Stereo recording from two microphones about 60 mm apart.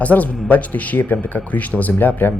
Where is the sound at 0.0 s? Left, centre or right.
Left.